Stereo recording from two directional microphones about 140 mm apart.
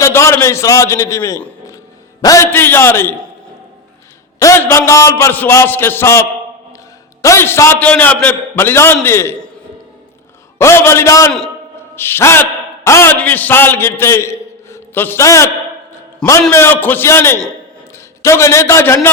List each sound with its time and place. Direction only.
0.0 s a man's voice: 20° left (ahead or behind)
4.4 s a man's voice: 20° left (ahead or behind)
10.6 s a man's voice: 20° left (ahead or behind)
16.5 s a man's voice: 15° left (ahead or behind)